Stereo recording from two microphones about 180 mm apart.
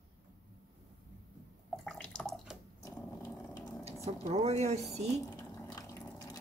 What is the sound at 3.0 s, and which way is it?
Dog, 10° left (ahead or behind).